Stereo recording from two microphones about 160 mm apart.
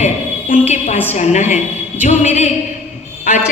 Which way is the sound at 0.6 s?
45° left (ahead or behind).